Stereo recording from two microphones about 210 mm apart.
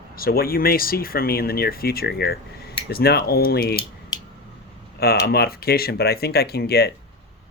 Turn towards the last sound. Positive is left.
turn(degrees=50)  # may be behind; listen again after turning